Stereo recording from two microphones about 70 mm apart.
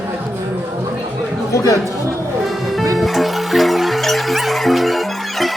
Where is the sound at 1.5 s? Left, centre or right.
Left.